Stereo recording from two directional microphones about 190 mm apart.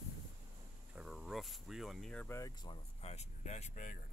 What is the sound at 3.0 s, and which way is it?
Speech, 35° left (ahead or behind).